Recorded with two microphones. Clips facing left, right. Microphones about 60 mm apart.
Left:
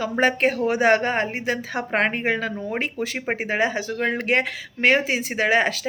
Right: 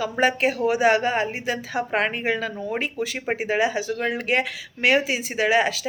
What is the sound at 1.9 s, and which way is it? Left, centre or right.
Speech, left.